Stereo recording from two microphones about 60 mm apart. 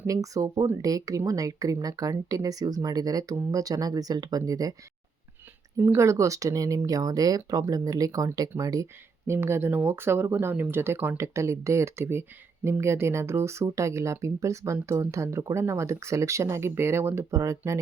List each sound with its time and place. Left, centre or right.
0.1 s speech: right
6.0 s speech: right
9.2 s speech: right
11.2 s speech: right
17.3 s speech: right